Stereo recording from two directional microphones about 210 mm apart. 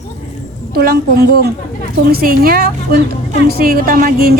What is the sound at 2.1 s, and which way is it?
Speech, 45° right (ahead or behind).